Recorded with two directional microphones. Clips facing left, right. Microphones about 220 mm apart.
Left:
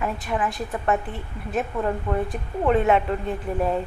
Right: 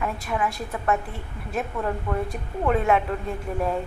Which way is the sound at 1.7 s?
15° left (ahead or behind).